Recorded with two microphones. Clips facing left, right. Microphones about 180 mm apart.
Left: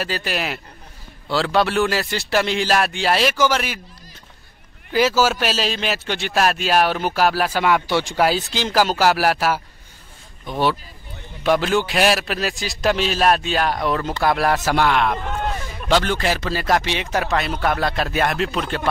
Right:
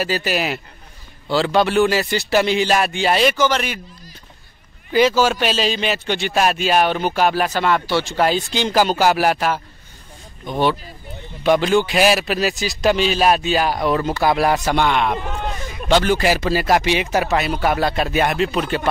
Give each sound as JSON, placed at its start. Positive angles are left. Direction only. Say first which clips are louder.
{"t": 0.0, "sound": "a man's voice", "louder": "right 4 dB", "side_deg": 0}
{"t": 4.9, "sound": "a man's voice", "louder": "right 2 dB", "side_deg": 5}
{"t": 8.3, "sound": "a man's voice", "louder": "right 2 dB", "side_deg": 0}